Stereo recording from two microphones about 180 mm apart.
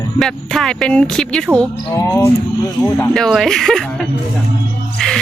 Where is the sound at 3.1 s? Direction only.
Centre (ahead or behind).